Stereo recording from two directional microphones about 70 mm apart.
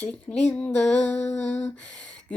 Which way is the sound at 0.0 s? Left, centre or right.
Centre.